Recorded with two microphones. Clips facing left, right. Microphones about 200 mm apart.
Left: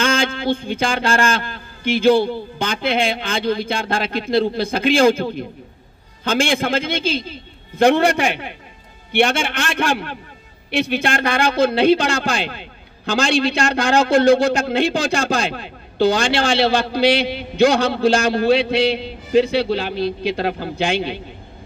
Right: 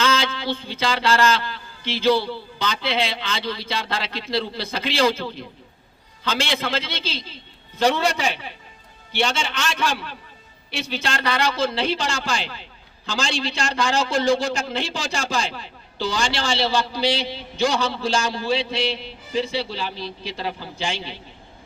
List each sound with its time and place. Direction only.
0.0 s a man's voice: 50° left (ahead or behind)